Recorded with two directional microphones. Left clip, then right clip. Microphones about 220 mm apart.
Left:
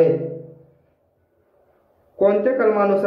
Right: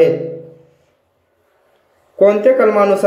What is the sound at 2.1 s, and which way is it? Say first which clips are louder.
Speech: right 7 dB; 20° right (ahead or behind).